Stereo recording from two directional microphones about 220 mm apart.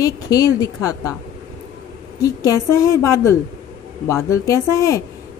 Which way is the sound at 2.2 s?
15° left (ahead or behind).